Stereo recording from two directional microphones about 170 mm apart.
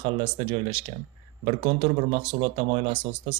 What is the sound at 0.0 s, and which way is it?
Speech, 30° right (ahead or behind).